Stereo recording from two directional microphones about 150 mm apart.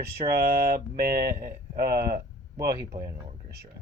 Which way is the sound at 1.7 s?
90° right.